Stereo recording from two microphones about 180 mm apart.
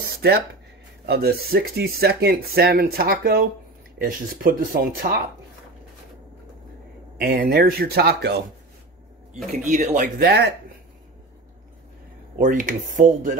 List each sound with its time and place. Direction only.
1.0 s speech: 60° right (ahead or behind)
7.2 s speech: 55° right (ahead or behind)
9.7 s speech: 45° right (ahead or behind); by 10.5 s 60° right (ahead or behind)
12.4 s speech: 50° right (ahead or behind)